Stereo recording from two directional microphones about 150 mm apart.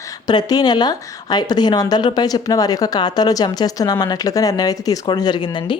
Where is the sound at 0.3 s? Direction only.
25° left (ahead or behind).